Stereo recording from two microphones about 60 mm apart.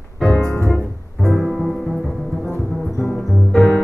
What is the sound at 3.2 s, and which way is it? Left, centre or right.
Music, centre.